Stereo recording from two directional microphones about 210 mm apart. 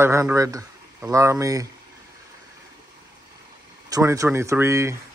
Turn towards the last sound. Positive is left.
turn(degrees=-15)  # may be behind; listen again after turning